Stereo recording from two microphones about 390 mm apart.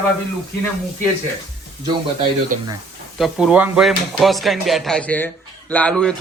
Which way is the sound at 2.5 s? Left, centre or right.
Centre.